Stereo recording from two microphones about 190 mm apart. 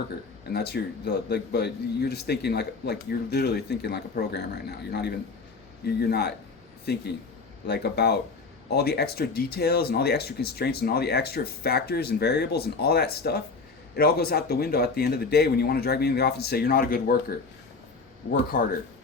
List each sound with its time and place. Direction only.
0.5 s speech: 60° left (ahead or behind)
18.3 s a man's voice: 50° left (ahead or behind)